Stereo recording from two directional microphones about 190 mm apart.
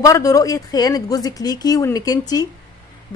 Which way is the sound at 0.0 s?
15° left (ahead or behind).